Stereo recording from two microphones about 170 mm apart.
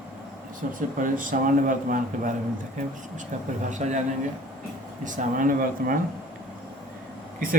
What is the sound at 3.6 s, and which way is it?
Speech, 45° right (ahead or behind).